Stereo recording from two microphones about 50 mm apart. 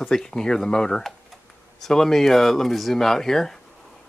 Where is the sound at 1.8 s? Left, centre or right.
Centre.